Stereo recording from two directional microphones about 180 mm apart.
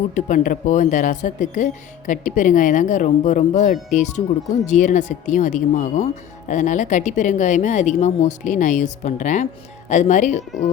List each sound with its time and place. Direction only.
0.1 s speech: 45° left (ahead or behind)